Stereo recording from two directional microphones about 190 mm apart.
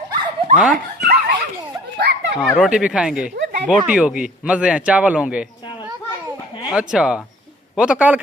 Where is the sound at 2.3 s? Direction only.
5° right (ahead or behind).